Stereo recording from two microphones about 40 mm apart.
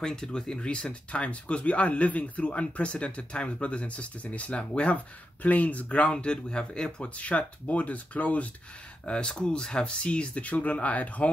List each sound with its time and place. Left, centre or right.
0.0 s speech: centre
5.4 s speech: left
7.0 s speech: left
9.0 s speech: centre; by 11.2 s left